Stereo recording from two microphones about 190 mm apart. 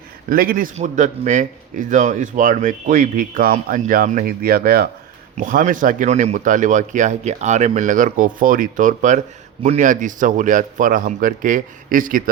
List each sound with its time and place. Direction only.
0.3 s speech: 50° right (ahead or behind)